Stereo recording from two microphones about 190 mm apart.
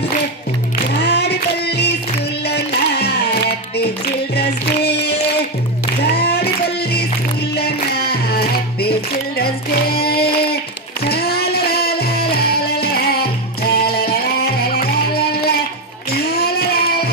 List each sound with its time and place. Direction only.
0.8 s female singing: 60° left (ahead or behind)
2.4 s music: 60° left (ahead or behind)
9.4 s a sound: 55° left (ahead or behind)
16.1 s child singing: 55° left (ahead or behind)